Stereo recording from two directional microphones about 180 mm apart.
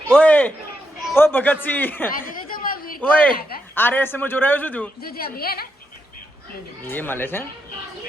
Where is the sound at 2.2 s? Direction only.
50° left (ahead or behind).